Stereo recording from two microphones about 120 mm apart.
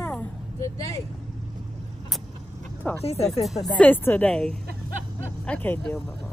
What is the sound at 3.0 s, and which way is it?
Speech, 60° left (ahead or behind).